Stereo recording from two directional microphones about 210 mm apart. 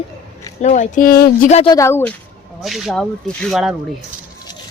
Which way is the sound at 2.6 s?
Centre (ahead or behind).